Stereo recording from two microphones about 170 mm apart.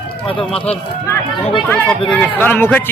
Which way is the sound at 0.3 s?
30° left (ahead or behind).